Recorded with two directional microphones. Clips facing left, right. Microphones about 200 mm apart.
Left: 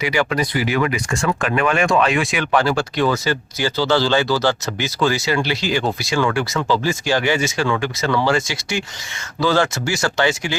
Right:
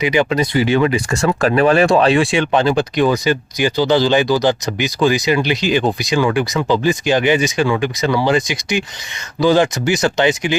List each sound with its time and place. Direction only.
0.0 s speech: 20° right (ahead or behind)